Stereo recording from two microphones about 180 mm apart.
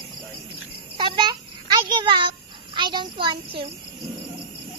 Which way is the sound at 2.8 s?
25° right (ahead or behind).